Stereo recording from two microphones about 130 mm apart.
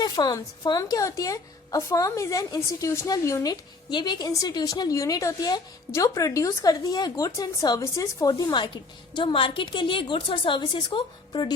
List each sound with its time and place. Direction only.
0.0 s a woman's voice: 30° left (ahead or behind)